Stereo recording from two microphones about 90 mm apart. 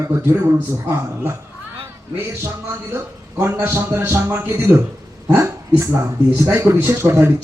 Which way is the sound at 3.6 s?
30° right (ahead or behind).